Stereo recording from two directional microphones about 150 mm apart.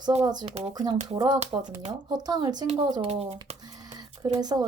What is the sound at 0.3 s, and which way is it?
Speech, 30° right (ahead or behind).